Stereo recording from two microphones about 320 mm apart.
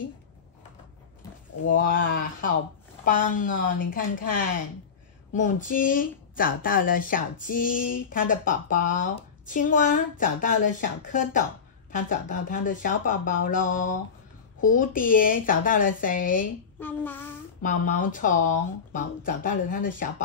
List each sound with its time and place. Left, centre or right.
1.7 s speech: left
16.8 s child singing: centre
17.6 s speech: left